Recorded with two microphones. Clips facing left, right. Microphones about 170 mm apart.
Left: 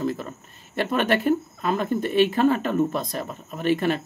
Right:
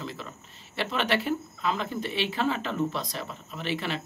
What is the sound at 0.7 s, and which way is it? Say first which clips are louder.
Speech: left 5 dB; 50° left (ahead or behind).